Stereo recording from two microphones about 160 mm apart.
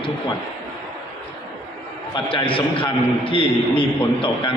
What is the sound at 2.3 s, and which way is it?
A man's voice, 35° left (ahead or behind).